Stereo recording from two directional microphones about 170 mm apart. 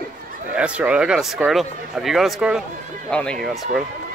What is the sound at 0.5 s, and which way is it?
Speech, 5° right (ahead or behind).